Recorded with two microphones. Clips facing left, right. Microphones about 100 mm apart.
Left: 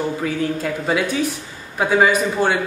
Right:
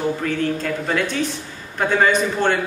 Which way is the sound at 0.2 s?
10° left (ahead or behind).